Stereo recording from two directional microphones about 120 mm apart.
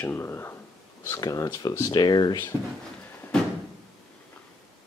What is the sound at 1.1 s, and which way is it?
Speech, 30° left (ahead or behind).